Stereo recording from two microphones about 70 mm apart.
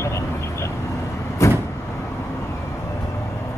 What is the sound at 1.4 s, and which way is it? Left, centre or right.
Vehicle, left.